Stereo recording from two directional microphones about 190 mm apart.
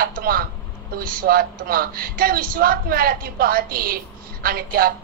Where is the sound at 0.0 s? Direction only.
50° right (ahead or behind).